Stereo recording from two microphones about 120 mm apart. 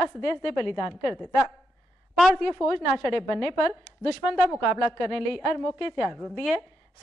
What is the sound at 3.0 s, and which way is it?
Speech, 5° right (ahead or behind).